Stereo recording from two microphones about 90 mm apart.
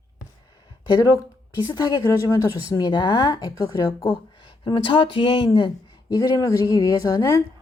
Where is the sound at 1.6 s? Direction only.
55° left (ahead or behind).